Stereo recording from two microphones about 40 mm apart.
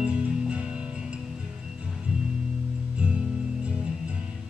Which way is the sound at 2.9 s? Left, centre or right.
Right.